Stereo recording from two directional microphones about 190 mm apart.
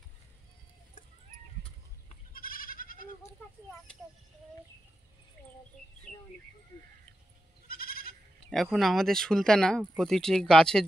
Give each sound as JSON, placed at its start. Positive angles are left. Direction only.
{"t": 2.3, "sound": "goat", "side_deg": 50}
{"t": 7.6, "sound": "goat", "side_deg": 50}
{"t": 8.7, "sound": "speech", "side_deg": 0}